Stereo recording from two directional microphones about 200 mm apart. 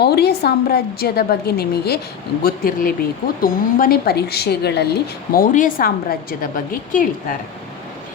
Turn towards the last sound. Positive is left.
turn(degrees=45)  # may be behind; listen again after turning